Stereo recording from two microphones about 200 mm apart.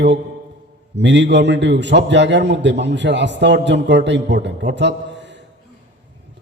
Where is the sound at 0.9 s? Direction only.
60° right (ahead or behind).